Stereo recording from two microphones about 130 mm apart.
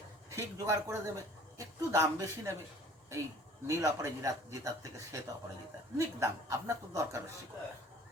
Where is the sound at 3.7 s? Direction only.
25° right (ahead or behind).